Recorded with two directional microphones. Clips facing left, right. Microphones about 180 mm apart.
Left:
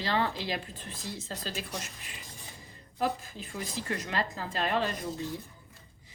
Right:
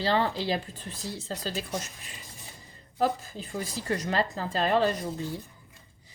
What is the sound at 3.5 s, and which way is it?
A woman's voice, 35° right (ahead or behind).